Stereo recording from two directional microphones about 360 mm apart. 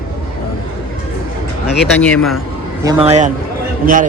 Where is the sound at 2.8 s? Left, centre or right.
Centre.